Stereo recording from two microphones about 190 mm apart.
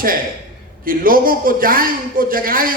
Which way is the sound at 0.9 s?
50° right (ahead or behind).